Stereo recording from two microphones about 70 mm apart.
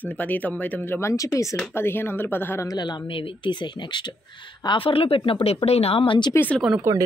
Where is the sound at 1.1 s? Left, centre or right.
Left.